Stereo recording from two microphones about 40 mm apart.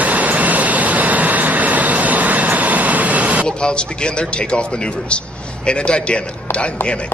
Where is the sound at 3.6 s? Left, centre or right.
Left.